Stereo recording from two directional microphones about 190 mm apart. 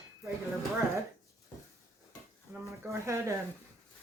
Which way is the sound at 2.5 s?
15° right (ahead or behind).